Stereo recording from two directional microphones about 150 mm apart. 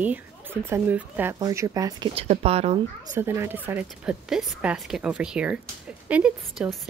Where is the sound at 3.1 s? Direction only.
15° right (ahead or behind).